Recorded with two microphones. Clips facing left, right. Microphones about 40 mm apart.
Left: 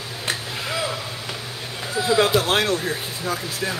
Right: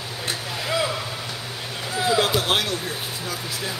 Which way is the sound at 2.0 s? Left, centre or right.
Left.